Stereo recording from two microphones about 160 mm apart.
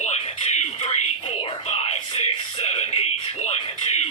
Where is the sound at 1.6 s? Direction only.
40° left (ahead or behind).